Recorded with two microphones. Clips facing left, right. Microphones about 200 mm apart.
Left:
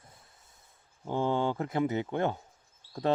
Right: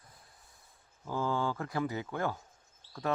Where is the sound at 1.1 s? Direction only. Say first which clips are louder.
Left 4 dB; 25° left (ahead or behind).